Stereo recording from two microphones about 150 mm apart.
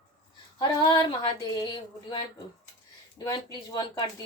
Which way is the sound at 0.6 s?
30° left (ahead or behind).